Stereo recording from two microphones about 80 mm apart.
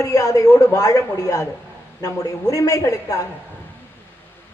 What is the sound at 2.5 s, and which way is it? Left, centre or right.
Speech, left.